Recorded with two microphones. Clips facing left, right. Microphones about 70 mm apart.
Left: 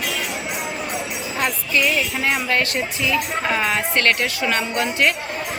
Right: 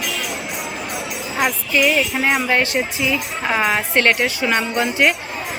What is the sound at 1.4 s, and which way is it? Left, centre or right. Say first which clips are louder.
Speech: right 3 dB; centre.